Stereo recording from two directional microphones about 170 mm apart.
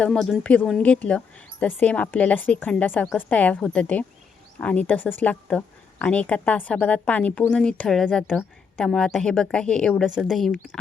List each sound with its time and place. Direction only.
0.0 s a woman's voice: centre (ahead or behind)